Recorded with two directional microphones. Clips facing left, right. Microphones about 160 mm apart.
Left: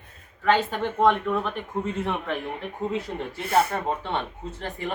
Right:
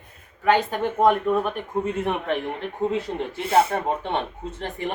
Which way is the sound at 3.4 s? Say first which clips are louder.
Right 3 dB; 25° right (ahead or behind).